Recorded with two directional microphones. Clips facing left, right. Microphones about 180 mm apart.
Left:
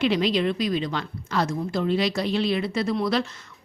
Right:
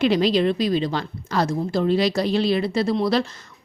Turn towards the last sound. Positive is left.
turn(degrees=-35)  # may be behind; listen again after turning